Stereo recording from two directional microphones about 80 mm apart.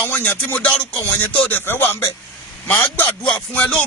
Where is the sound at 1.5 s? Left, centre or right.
Left.